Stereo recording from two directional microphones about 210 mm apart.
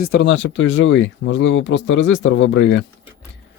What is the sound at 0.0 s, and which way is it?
Speech, 50° left (ahead or behind).